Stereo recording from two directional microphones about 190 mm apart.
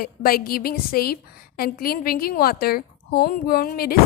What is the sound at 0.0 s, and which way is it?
A woman's voice, 50° left (ahead or behind).